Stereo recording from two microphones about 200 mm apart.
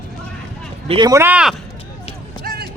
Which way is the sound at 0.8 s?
30° right (ahead or behind).